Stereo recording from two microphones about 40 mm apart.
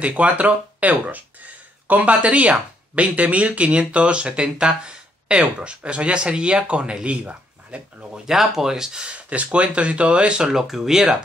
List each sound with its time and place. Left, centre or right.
0.0 s speech: right
8.1 s speech: centre
9.0 s speech: right
10.5 s speech: centre